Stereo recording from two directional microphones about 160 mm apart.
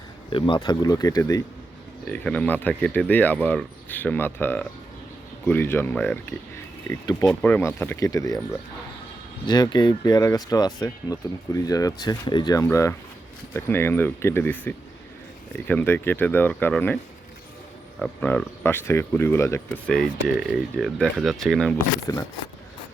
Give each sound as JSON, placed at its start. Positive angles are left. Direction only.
{"t": 0.3, "sound": "speech", "side_deg": 30}
{"t": 2.1, "sound": "speech", "side_deg": 5}
{"t": 7.3, "sound": "speech", "side_deg": 10}
{"t": 9.5, "sound": "speech", "side_deg": 25}
{"t": 12.6, "sound": "speech", "side_deg": 15}
{"t": 18.0, "sound": "speech", "side_deg": 5}
{"t": 19.9, "sound": "speech", "side_deg": 5}
{"t": 22.1, "sound": "speech", "side_deg": 20}